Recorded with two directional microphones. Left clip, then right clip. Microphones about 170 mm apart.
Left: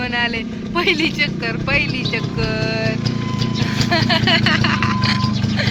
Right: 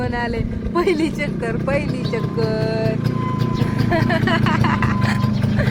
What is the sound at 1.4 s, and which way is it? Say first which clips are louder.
Speech: left 3 dB; 20° right (ahead or behind).